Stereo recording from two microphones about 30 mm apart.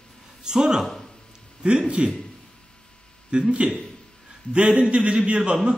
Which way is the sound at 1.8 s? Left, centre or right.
Right.